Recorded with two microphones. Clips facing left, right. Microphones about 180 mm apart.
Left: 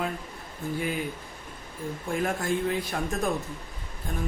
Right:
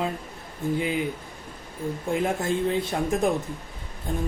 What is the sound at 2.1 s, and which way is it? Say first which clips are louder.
Speech: right 2 dB; 20° right (ahead or behind).